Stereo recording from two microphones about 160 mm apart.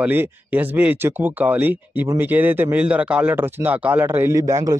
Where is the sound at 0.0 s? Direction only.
10° right (ahead or behind).